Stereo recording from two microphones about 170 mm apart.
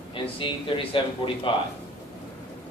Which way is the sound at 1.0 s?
30° left (ahead or behind).